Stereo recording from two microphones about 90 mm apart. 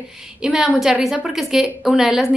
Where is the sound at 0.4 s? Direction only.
5° right (ahead or behind).